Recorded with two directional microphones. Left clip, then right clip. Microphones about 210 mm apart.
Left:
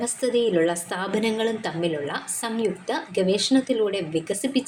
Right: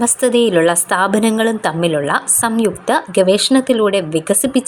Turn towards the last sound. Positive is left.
turn(degrees=-35)  # may be behind; listen again after turning